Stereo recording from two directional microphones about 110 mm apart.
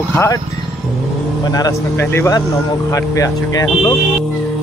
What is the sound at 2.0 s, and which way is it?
Speech, 20° left (ahead or behind).